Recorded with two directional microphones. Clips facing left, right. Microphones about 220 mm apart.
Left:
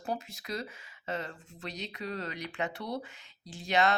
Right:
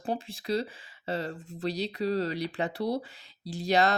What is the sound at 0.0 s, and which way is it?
Speech, 30° right (ahead or behind).